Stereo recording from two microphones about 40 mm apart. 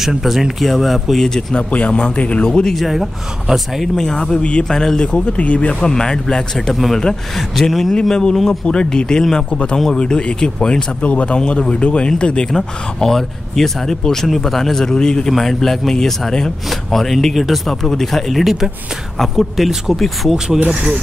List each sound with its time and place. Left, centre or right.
0.0 s speech: centre
1.1 s speech: centre
1.7 s speech: left
2.7 s speech: centre
3.9 s speech: centre
4.4 s speech: left
4.6 s speech: centre
5.9 s speech: centre
6.7 s speech: centre
11.0 s speech: left
11.3 s speech: left
12.4 s speech: centre
20.3 s speech: centre